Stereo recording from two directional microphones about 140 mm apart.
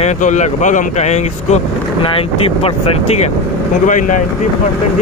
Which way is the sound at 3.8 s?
65° left (ahead or behind).